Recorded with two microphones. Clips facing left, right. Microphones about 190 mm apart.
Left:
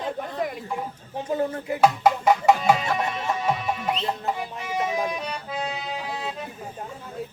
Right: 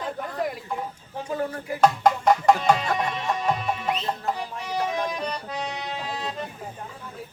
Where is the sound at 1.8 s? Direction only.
5° left (ahead or behind).